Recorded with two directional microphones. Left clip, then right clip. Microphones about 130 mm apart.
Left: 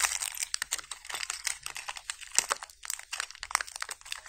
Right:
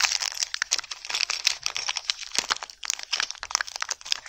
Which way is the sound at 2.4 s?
25° right (ahead or behind).